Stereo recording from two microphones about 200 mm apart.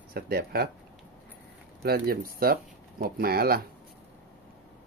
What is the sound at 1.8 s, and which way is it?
Speech, 50° right (ahead or behind).